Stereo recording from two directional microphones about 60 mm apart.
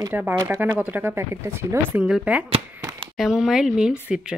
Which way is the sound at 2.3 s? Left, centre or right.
Centre.